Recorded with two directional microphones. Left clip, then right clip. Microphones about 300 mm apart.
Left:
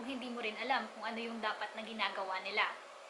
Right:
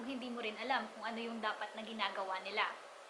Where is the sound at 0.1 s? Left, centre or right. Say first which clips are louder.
Left 2 dB; centre.